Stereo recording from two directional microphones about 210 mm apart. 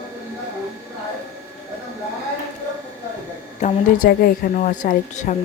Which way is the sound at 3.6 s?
35° left (ahead or behind).